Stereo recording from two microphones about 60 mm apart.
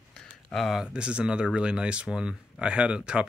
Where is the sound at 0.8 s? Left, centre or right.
Centre.